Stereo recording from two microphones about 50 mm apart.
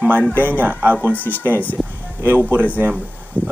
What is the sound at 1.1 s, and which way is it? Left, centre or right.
Speech, left.